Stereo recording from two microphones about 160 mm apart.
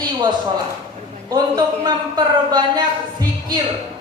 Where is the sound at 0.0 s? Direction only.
25° right (ahead or behind).